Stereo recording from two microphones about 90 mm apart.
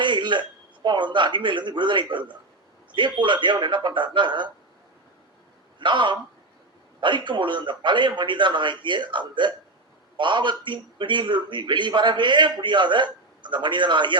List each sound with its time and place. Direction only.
0.0 s a sound: 60° right (ahead or behind)
0.9 s a man's voice: 60° right (ahead or behind)
5.8 s a man's voice: 60° right (ahead or behind)